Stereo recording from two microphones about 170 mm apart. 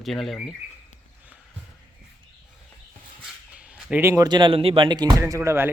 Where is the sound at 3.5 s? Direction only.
5° right (ahead or behind).